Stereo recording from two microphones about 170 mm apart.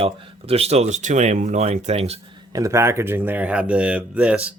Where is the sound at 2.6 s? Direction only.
20° right (ahead or behind).